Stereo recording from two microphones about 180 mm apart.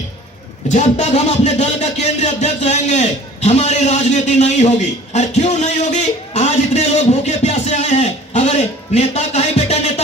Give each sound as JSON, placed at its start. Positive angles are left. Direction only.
{"t": 0.7, "sound": "speech", "side_deg": 40}